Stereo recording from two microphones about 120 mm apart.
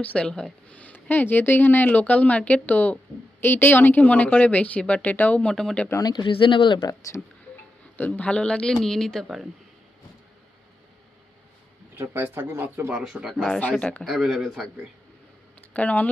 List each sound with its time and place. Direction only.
0.0 s speech: 10° left (ahead or behind)
5.9 s speech: 30° left (ahead or behind)
6.8 s speech: 25° left (ahead or behind)
8.0 s speech: 10° left (ahead or behind)
12.0 s speech: 15° right (ahead or behind); by 14.0 s 10° left (ahead or behind)
14.0 s speech: centre (ahead or behind)
15.7 s speech: 10° left (ahead or behind)